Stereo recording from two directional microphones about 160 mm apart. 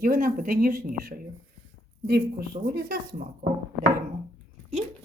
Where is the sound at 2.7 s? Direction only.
75° right (ahead or behind).